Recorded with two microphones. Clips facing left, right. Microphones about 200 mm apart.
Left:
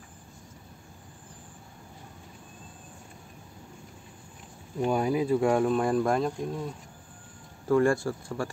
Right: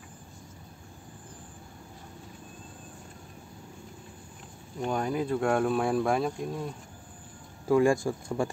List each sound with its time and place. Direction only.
4.8 s speech: 10° left (ahead or behind)
7.6 s speech: 10° right (ahead or behind)